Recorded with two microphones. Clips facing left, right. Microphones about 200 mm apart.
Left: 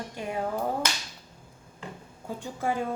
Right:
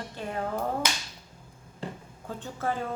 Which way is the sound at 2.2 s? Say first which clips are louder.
Left 2 dB; 10° left (ahead or behind).